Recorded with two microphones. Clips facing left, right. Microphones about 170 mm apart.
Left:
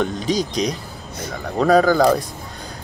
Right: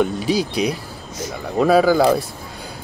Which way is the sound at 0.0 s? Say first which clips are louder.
Right 2 dB; 10° right (ahead or behind).